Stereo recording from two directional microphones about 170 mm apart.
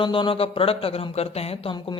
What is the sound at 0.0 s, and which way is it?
Speech, 30° left (ahead or behind).